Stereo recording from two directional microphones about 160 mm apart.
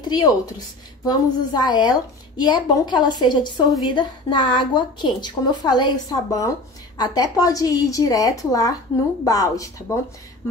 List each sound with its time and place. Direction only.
0.1 s a woman's voice: 25° left (ahead or behind)